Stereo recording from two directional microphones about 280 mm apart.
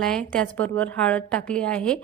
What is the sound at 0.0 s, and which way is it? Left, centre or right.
A woman's voice, centre.